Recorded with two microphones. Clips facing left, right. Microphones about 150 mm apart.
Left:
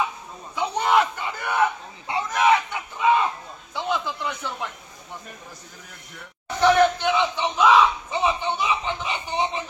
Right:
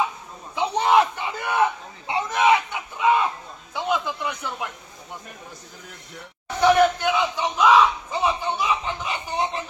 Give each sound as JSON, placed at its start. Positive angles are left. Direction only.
{"t": 0.6, "sound": "a sound", "side_deg": -20}
{"t": 4.3, "sound": "speech", "side_deg": -15}
{"t": 6.6, "sound": "battle cry", "side_deg": -10}